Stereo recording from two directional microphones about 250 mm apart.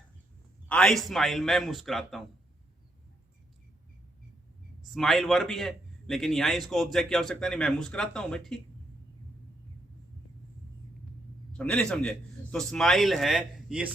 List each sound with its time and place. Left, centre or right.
0.7 s a man's voice: centre
4.9 s a man's voice: centre
11.5 s a man's voice: centre